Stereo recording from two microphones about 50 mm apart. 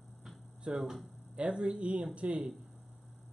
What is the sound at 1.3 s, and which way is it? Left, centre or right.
Speech, right.